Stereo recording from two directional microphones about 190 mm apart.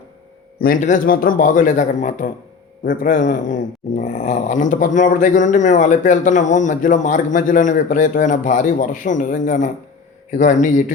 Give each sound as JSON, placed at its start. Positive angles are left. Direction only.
{"t": 0.6, "sound": "a man's voice", "side_deg": 45}